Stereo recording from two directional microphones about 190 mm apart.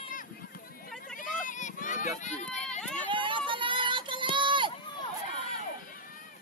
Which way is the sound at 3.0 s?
25° right (ahead or behind).